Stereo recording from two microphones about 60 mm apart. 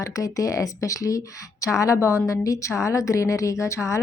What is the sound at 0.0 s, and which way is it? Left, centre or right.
A woman's voice, left.